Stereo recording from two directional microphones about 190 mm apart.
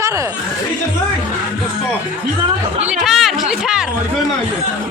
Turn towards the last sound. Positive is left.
turn(degrees=-5)  # may be behind; listen again after turning